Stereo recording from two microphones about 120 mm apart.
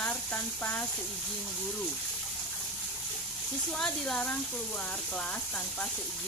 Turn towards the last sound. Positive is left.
turn(degrees=10)  # may be behind; listen again after turning